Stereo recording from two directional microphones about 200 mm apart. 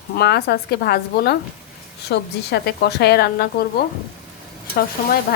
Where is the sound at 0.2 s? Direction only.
55° left (ahead or behind).